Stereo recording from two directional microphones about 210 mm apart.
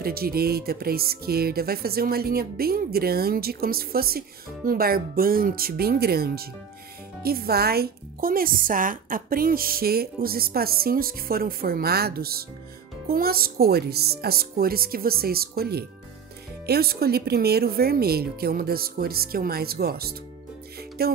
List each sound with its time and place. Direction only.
0.0 s a woman's voice: 45° right (ahead or behind)